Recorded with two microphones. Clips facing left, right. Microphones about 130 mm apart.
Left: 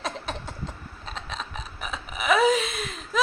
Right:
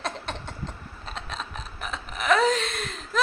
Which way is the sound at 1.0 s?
Centre (ahead or behind).